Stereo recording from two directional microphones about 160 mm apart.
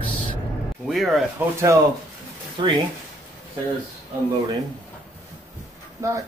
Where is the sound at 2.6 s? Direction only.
30° right (ahead or behind).